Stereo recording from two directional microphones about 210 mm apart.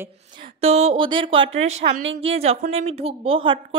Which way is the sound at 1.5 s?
70° right (ahead or behind).